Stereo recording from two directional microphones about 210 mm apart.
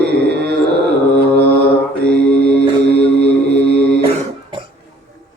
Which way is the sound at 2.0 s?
5° left (ahead or behind).